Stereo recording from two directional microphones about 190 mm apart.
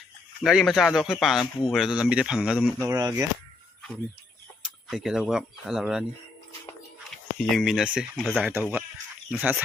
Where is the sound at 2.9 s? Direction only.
15° right (ahead or behind).